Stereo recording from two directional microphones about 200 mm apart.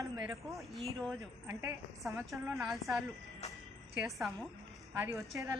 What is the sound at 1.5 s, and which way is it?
Speech, 15° right (ahead or behind).